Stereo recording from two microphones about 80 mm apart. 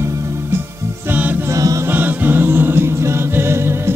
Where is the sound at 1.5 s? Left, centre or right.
Right.